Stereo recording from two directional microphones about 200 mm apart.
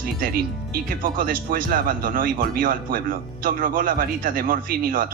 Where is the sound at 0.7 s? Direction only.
45° right (ahead or behind).